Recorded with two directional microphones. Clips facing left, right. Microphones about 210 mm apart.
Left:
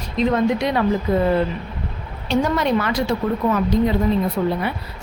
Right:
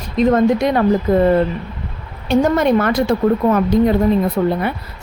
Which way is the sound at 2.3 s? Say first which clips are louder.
Right 5 dB; 50° right (ahead or behind).